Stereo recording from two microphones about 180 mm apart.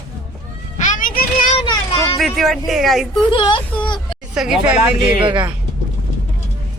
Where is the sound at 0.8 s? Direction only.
45° left (ahead or behind).